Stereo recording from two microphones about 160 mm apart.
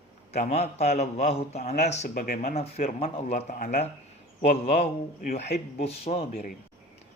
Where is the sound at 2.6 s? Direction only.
40° left (ahead or behind).